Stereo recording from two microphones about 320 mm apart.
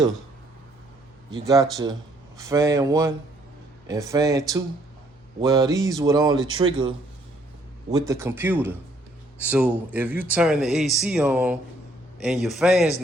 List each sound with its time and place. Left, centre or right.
1.3 s speech: centre